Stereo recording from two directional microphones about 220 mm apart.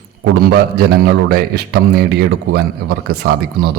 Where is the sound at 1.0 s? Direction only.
45° right (ahead or behind).